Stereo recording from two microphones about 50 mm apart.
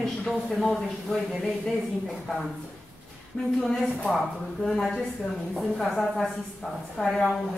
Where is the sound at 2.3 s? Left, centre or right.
Centre.